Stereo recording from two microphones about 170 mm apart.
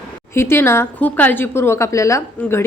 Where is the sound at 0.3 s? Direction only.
15° left (ahead or behind).